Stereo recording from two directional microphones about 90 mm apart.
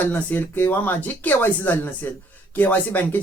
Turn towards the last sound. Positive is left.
turn(degrees=20)  # may be behind; listen again after turning